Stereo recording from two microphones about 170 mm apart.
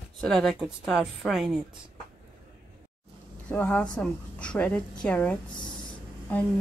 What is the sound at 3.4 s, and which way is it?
A woman's voice, 10° left (ahead or behind).